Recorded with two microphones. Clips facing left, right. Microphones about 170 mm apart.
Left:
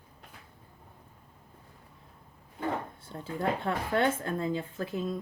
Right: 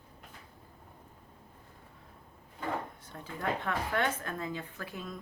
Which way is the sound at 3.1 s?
30° left (ahead or behind).